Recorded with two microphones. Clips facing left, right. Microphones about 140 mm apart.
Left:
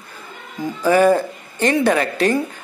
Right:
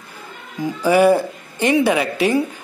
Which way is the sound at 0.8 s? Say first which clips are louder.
Even; 10° right (ahead or behind).